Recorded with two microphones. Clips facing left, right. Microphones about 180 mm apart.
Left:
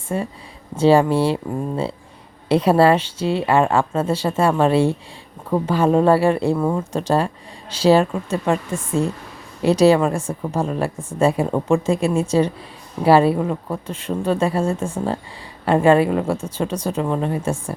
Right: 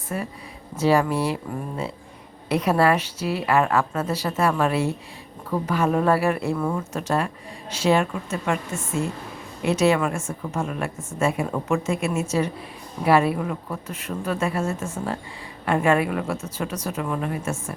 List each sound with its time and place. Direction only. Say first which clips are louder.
0.1 s a woman's voice: left 5 dB; 25° left (ahead or behind)